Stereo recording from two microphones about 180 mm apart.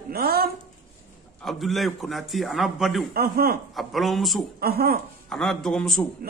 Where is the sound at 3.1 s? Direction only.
55° right (ahead or behind).